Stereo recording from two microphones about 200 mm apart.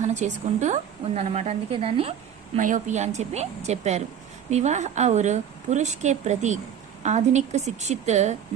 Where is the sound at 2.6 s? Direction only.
40° right (ahead or behind).